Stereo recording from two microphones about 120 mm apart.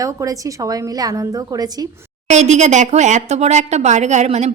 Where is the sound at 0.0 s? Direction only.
30° right (ahead or behind).